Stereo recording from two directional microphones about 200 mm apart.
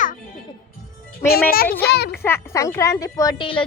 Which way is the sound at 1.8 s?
55° left (ahead or behind).